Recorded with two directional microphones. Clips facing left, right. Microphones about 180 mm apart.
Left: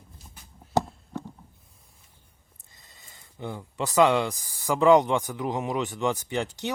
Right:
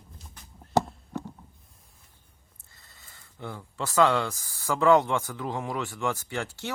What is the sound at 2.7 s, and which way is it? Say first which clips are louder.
Speech: left 1 dB; 15° left (ahead or behind).